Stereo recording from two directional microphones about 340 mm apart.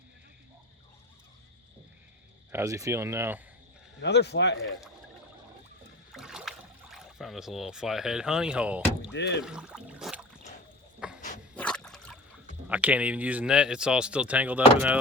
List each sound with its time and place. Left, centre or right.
2.5 s speech: centre
4.0 s speech: left
6.1 s boat: centre
6.9 s speech: centre
9.1 s speech: left
9.4 s a sound: centre
11.0 s dog: centre
11.5 s trickle: centre
12.6 s speech: centre